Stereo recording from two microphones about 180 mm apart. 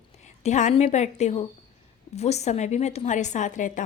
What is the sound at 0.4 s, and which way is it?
Speech, 40° left (ahead or behind).